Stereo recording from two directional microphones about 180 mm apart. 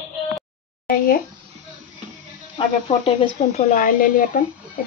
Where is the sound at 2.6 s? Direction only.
30° left (ahead or behind).